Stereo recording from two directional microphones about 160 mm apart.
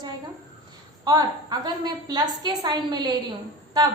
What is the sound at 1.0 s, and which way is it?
A woman's voice, 25° right (ahead or behind).